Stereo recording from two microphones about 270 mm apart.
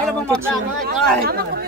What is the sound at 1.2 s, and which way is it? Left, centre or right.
Speech, right.